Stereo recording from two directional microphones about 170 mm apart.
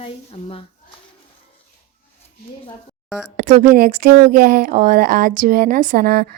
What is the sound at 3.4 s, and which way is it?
Speech, 50° right (ahead or behind).